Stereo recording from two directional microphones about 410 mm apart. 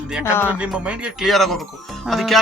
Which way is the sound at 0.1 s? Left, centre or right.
Centre.